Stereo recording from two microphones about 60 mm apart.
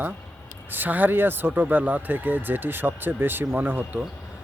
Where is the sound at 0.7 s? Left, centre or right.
Right.